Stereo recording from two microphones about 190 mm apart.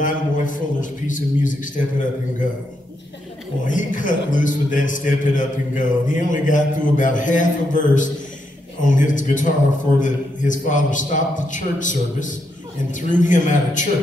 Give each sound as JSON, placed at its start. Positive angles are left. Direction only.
{"t": 0.0, "sound": "a man's voice", "side_deg": 45}
{"t": 3.6, "sound": "a man's voice", "side_deg": 45}